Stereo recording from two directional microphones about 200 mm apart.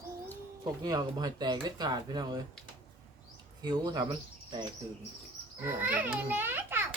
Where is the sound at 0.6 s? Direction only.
20° right (ahead or behind).